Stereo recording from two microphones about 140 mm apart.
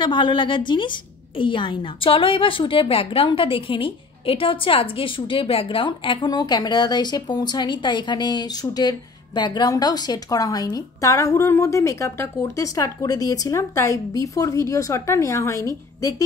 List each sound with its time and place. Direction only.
0.0 s a woman's voice: 35° left (ahead or behind)